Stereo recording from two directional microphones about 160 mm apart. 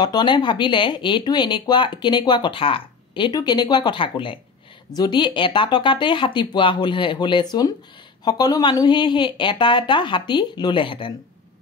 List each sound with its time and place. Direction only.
0.0 s speech: 25° left (ahead or behind)